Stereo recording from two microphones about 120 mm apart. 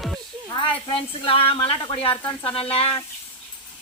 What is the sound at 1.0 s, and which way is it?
Speech, 45° left (ahead or behind).